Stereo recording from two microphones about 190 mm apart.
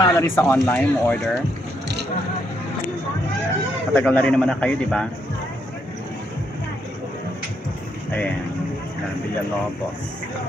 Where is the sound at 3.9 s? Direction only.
10° left (ahead or behind).